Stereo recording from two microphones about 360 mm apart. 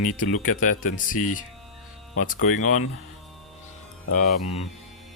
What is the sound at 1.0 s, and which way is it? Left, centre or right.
Speech, left.